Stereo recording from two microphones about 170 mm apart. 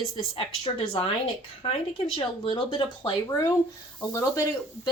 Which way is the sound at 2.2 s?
30° left (ahead or behind).